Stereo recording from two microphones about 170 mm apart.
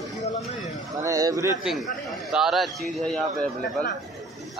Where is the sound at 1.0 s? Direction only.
20° right (ahead or behind).